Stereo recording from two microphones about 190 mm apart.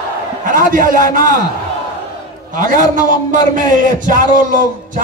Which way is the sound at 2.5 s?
45° right (ahead or behind).